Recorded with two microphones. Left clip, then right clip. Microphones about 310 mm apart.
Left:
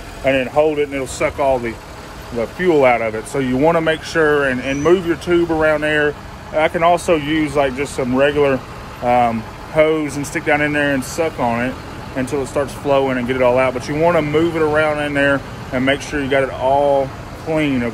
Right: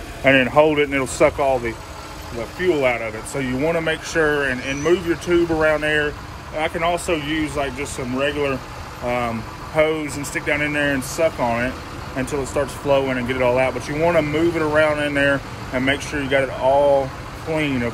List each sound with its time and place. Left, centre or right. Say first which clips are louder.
0.2 s speech: right 1 dB; right
1.4 s speech: left 3 dB; centre